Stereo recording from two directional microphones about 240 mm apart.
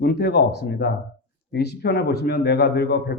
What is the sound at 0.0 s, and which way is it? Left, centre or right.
A man's voice, left.